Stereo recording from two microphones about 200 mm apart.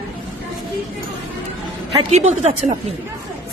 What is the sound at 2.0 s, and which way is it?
Speech, 35° right (ahead or behind).